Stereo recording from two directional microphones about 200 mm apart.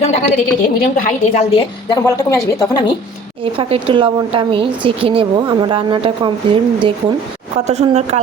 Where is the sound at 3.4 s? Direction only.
25° right (ahead or behind).